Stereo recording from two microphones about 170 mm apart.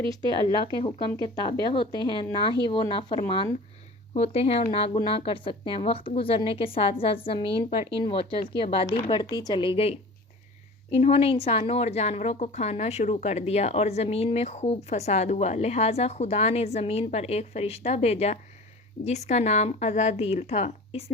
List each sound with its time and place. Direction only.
0.0 s speech: 25° right (ahead or behind)
0.7 s a woman's voice: 25° left (ahead or behind)
10.9 s speech: 35° left (ahead or behind)